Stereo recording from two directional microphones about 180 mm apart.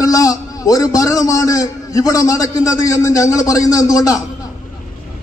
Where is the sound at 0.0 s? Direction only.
20° left (ahead or behind).